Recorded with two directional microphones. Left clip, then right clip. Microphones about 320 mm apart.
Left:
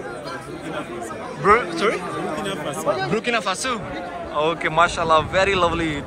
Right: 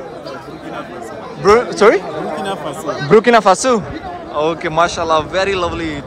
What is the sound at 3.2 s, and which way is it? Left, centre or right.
Speech, right.